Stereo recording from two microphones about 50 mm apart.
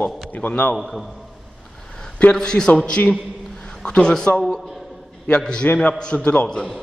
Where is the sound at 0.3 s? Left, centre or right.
Left.